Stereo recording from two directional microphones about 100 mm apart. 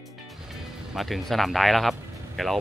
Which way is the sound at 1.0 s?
Centre (ahead or behind).